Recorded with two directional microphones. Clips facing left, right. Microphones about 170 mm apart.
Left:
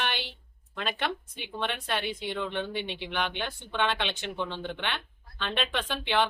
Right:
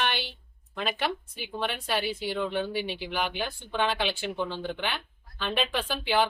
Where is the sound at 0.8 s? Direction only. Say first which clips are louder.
Right 2 dB; 5° right (ahead or behind).